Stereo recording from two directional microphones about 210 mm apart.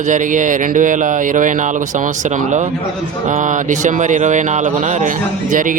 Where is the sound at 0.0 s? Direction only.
40° right (ahead or behind).